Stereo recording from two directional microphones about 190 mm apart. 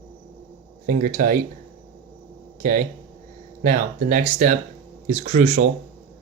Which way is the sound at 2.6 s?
45° right (ahead or behind).